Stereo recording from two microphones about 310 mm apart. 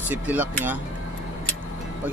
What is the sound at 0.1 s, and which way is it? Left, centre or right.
Speech, centre.